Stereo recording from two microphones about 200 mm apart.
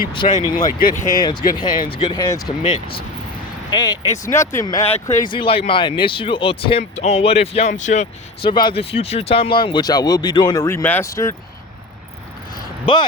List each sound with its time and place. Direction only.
0.3 s speech: 20° left (ahead or behind)
0.8 s speech: 45° left (ahead or behind)
1.9 s speech: 25° left (ahead or behind)
4.8 s speech: 30° left (ahead or behind)
8.4 s speech: 25° left (ahead or behind)
12.5 s vehicle: 25° left (ahead or behind)